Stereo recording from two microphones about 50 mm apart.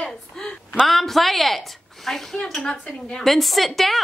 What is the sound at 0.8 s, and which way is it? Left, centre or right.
A woman's voice, centre.